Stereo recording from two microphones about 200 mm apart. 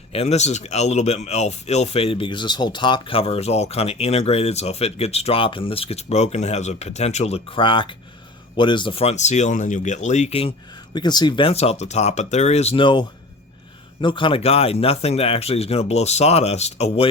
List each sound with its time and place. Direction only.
0.1 s speech: 30° left (ahead or behind)